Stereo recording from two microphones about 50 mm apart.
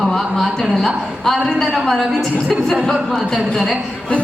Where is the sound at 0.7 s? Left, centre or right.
Centre.